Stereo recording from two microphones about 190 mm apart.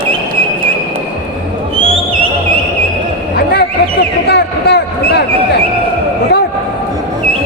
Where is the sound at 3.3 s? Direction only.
55° left (ahead or behind).